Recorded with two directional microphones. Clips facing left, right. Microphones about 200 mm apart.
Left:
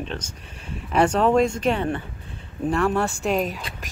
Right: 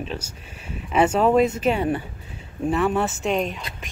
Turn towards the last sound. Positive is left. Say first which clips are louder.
# even
turn(degrees=0)  # may be behind; listen again after turning